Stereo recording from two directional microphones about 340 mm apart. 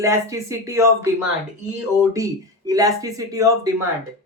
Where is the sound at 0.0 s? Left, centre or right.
Centre.